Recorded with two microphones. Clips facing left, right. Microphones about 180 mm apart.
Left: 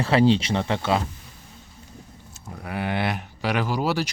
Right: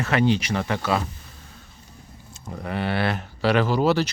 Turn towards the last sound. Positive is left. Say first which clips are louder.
# right 4 dB
turn(degrees=10)  # may be behind; listen again after turning